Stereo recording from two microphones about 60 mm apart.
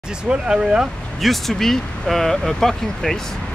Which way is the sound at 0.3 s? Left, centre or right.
Centre.